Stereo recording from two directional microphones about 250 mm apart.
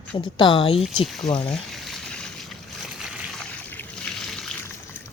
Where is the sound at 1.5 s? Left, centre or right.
Centre.